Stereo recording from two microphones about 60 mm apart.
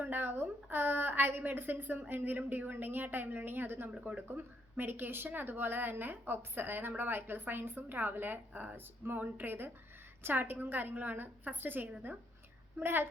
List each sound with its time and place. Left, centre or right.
0.0 s speech: right